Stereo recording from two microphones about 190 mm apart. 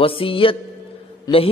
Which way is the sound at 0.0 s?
30° left (ahead or behind).